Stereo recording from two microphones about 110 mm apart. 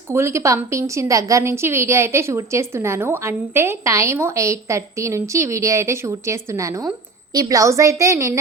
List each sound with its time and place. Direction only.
0.1 s a woman's voice: 25° right (ahead or behind)